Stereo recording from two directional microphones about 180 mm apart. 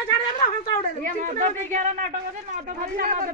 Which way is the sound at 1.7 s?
45° right (ahead or behind).